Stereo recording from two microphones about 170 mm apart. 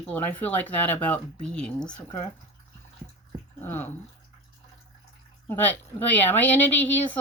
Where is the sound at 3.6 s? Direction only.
15° left (ahead or behind).